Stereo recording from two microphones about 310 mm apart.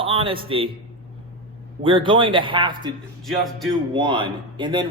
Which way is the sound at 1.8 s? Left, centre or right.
Centre.